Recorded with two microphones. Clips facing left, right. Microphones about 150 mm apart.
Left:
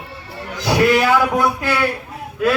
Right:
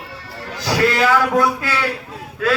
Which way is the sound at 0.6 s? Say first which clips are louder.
Left 2 dB; 20° left (ahead or behind).